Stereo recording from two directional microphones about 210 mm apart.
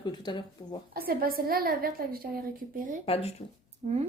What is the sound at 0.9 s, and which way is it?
A woman's voice, 45° right (ahead or behind).